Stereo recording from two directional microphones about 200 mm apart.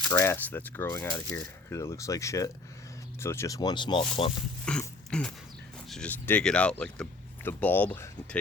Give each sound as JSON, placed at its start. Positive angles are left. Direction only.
{"t": 0.0, "sound": "speech", "side_deg": 15}
{"t": 4.6, "sound": "a sound", "side_deg": 5}
{"t": 5.9, "sound": "speech", "side_deg": 5}